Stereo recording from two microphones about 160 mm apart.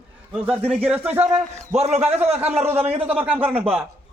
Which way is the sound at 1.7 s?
40° right (ahead or behind).